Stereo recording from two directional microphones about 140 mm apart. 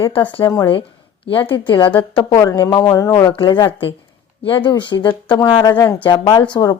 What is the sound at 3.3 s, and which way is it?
A woman's voice, 35° left (ahead or behind).